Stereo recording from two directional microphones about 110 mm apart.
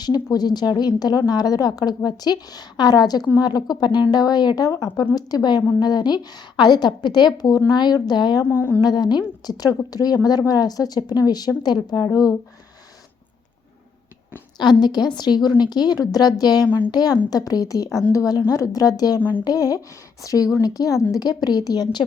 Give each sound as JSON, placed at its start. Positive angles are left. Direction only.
{"t": 0.0, "sound": "a woman's voice", "side_deg": 35}
{"t": 8.4, "sound": "speech", "side_deg": 20}
{"t": 8.8, "sound": "a woman's voice", "side_deg": 40}
{"t": 14.6, "sound": "a woman's voice", "side_deg": 40}